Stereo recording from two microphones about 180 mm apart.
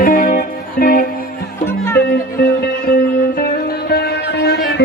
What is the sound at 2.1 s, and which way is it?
Music, 60° left (ahead or behind).